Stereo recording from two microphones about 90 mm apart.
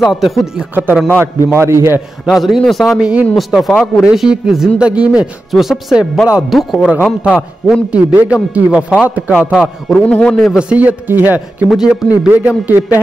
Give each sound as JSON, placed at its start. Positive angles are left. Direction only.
{"t": 0.0, "sound": "speech", "side_deg": 0}
{"t": 1.0, "sound": "a man's voice", "side_deg": -25}
{"t": 2.2, "sound": "speech", "side_deg": 0}
{"t": 3.0, "sound": "speech", "side_deg": -10}
{"t": 3.3, "sound": "a man's voice", "side_deg": 0}
{"t": 9.9, "sound": "a man's voice", "side_deg": 10}
{"t": 10.4, "sound": "speech", "side_deg": -10}
{"t": 11.7, "sound": "speech", "side_deg": -5}
{"t": 12.3, "sound": "a man's voice", "side_deg": -20}